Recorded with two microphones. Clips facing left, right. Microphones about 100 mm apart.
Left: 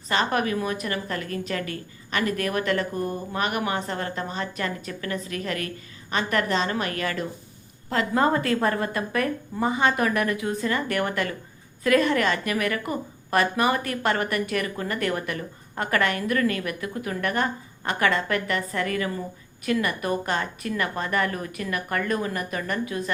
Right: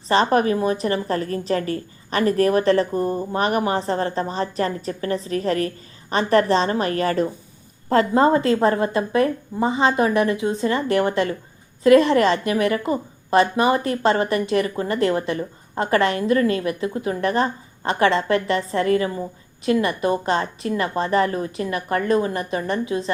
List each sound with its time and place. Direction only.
0.1 s a woman's voice: 35° right (ahead or behind)